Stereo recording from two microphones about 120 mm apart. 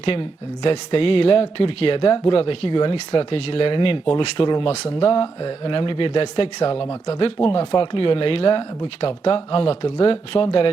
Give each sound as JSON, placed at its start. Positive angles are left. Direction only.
{"t": 0.0, "sound": "speech", "side_deg": 50}